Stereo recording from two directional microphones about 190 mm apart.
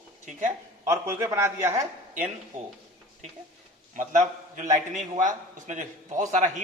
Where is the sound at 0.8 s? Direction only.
15° right (ahead or behind).